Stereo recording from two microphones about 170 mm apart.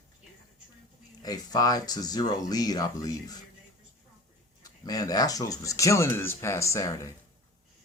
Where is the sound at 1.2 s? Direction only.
20° left (ahead or behind).